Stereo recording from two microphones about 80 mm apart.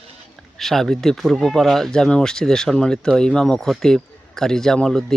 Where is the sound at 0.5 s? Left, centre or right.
Centre.